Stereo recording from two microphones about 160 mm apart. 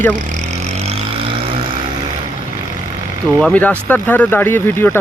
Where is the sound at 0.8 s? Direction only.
40° right (ahead or behind).